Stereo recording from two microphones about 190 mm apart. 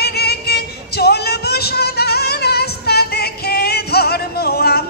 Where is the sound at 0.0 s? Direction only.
55° left (ahead or behind).